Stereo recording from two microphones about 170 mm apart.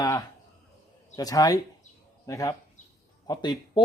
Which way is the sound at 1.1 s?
20° left (ahead or behind).